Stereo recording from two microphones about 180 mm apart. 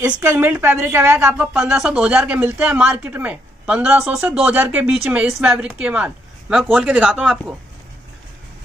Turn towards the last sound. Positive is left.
turn(degrees=0)  # may be behind; listen again after turning